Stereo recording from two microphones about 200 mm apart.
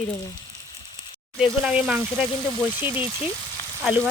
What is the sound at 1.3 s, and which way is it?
Speech, centre (ahead or behind).